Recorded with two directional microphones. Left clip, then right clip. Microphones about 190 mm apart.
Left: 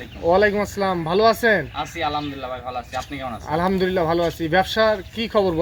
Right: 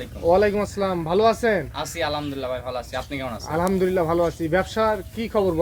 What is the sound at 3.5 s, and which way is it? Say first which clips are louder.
Speech: left 1 dB; 35° left (ahead or behind).